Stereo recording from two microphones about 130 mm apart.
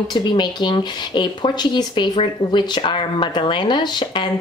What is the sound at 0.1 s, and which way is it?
A woman's voice, 35° left (ahead or behind).